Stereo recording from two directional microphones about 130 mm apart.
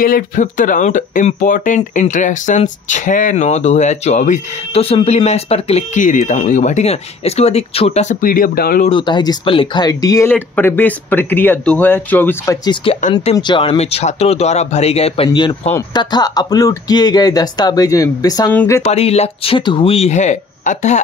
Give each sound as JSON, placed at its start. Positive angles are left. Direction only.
{"t": 0.0, "sound": "speech", "side_deg": 85}
{"t": 1.8, "sound": "speech", "side_deg": 70}
{"t": 4.7, "sound": "speech", "side_deg": 50}
{"t": 5.9, "sound": "speech", "side_deg": 75}
{"t": 8.8, "sound": "speech", "side_deg": 35}
{"t": 9.8, "sound": "speech", "side_deg": 25}
{"t": 10.2, "sound": "speech", "side_deg": 15}
{"t": 12.6, "sound": "speech", "side_deg": 45}
{"t": 15.2, "sound": "speech", "side_deg": 35}
{"t": 18.5, "sound": "speech", "side_deg": 15}
{"t": 18.8, "sound": "speech", "side_deg": 55}
{"t": 20.1, "sound": "speech", "side_deg": 65}